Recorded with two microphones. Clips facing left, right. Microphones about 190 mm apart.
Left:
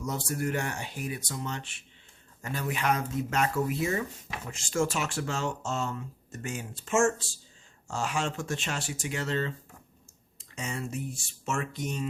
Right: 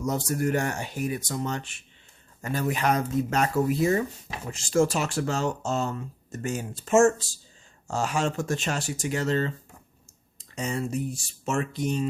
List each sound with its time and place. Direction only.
0.0 s speech: 45° right (ahead or behind)